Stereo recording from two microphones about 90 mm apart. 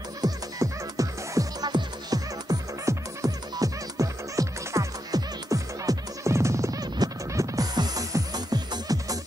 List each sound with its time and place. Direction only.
0.2 s music: 40° right (ahead or behind)